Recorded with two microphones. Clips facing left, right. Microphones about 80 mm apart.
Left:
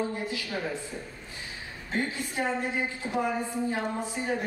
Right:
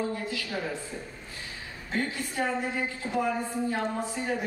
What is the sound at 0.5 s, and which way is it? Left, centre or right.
Speech, centre.